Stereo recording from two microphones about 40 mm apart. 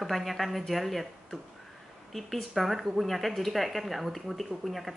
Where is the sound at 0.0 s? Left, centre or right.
Centre.